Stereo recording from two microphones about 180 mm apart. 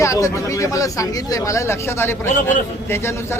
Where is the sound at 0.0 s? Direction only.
15° left (ahead or behind).